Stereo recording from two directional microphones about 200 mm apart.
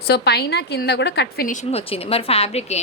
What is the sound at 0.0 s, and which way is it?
A woman's voice, 55° left (ahead or behind).